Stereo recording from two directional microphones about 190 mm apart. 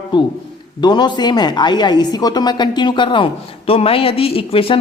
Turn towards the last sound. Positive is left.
turn(degrees=30)  # may be behind; listen again after turning